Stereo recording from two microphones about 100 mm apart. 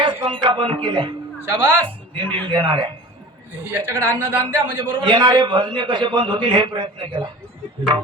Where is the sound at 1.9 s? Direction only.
60° right (ahead or behind).